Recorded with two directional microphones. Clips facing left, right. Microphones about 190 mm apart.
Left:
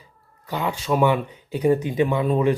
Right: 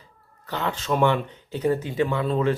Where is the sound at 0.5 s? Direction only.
10° left (ahead or behind).